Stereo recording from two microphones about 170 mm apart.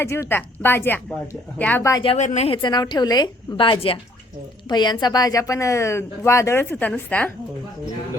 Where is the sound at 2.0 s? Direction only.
45° left (ahead or behind).